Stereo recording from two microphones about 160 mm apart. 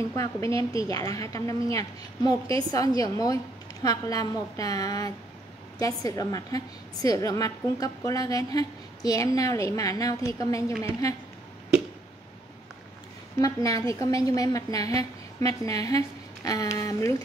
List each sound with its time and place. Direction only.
0.1 s a woman's voice: 20° left (ahead or behind)
13.4 s a woman's voice: 20° left (ahead or behind)